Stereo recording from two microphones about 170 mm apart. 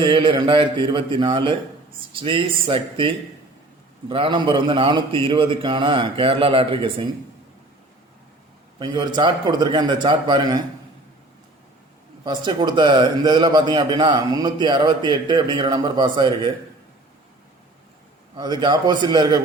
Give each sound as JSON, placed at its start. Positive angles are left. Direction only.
{"t": 0.0, "sound": "a man's voice", "side_deg": -30}
{"t": 8.8, "sound": "a man's voice", "side_deg": -25}
{"t": 12.2, "sound": "a man's voice", "side_deg": -25}
{"t": 18.3, "sound": "a man's voice", "side_deg": -25}